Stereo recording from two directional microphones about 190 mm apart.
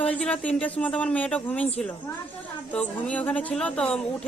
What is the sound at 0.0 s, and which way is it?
Speech, 5° left (ahead or behind).